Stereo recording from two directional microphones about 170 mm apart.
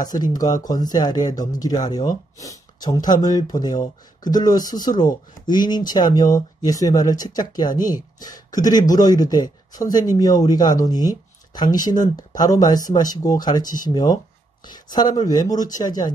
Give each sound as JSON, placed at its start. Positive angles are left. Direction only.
{"t": 0.0, "sound": "speech", "side_deg": 25}